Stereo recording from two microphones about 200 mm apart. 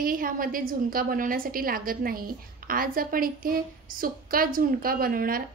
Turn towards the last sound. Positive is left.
turn(degrees=-45)  # may be behind; listen again after turning